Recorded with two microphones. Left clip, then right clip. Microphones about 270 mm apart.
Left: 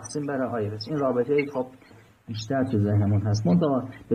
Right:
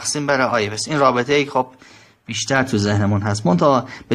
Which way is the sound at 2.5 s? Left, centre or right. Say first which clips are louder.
Right 7 dB; right.